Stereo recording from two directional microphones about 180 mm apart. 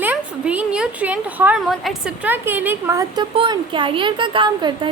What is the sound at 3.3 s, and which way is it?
Speech, 25° right (ahead or behind).